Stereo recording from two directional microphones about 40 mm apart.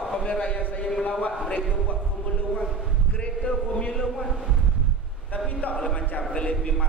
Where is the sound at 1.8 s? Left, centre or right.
Left.